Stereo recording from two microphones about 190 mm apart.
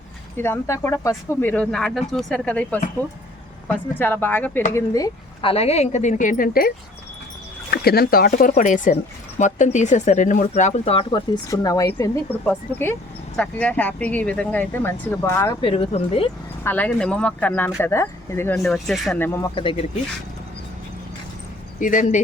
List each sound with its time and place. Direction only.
0.3 s speech: 10° left (ahead or behind); by 11.2 s 30° left (ahead or behind)
11.5 s speech: 20° left (ahead or behind)
15.6 s speech: 30° left (ahead or behind)
16.6 s speech: 10° left (ahead or behind)
18.6 s speech: centre (ahead or behind)
19.5 s speech: 25° left (ahead or behind)
21.8 s speech: 45° left (ahead or behind)